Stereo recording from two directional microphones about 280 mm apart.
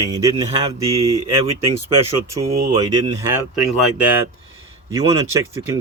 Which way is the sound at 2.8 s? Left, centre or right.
Centre.